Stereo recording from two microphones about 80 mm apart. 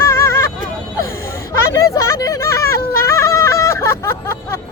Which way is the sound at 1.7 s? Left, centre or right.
Left.